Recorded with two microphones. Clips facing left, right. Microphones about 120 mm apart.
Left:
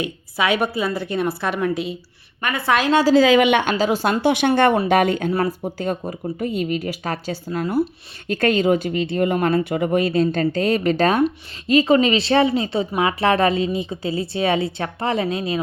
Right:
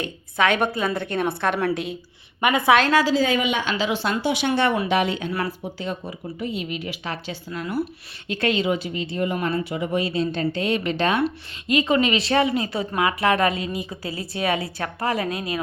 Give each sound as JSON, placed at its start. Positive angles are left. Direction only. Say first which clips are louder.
{"t": 0.0, "sound": "a woman's voice", "louder": "even", "side_deg": 10}
{"t": 2.4, "sound": "a woman's voice", "louder": "right 3 dB", "side_deg": -15}
{"t": 3.2, "sound": "a woman's voice", "louder": "left 8 dB", "side_deg": 85}
{"t": 3.8, "sound": "a woman's voice", "louder": "left 5 dB", "side_deg": 40}